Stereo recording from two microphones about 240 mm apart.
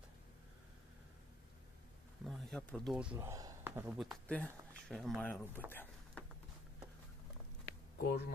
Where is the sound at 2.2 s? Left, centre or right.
Centre.